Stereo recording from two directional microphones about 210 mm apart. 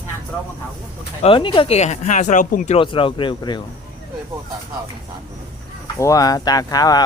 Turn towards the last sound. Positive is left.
turn(degrees=20)  # may be behind; listen again after turning